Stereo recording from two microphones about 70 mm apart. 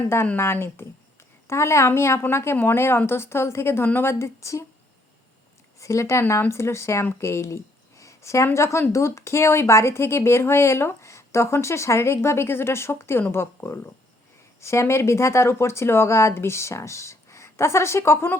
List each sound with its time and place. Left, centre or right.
0.3 s speech: left
5.8 s speech: left